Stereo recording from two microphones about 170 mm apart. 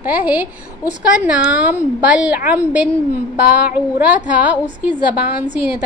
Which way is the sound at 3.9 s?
10° right (ahead or behind).